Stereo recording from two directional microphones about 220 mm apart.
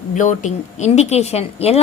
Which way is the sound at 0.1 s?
35° left (ahead or behind).